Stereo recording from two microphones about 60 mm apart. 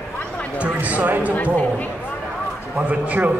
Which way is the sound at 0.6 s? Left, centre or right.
Right.